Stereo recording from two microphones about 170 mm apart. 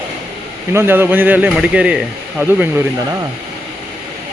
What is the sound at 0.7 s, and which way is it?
Speech, 15° right (ahead or behind).